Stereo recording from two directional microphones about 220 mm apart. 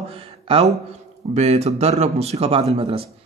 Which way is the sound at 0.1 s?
25° right (ahead or behind).